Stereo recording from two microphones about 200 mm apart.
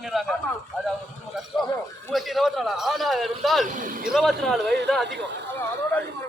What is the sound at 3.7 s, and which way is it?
Speech, 45° right (ahead or behind).